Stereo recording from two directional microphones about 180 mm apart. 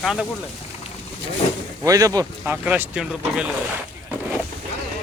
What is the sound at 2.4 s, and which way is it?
Speech, 10° right (ahead or behind).